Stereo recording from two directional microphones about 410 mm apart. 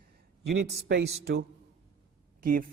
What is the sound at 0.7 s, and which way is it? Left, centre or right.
A man's voice, right.